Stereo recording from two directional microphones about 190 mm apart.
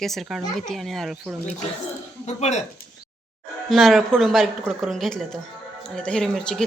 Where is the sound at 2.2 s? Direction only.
35° left (ahead or behind).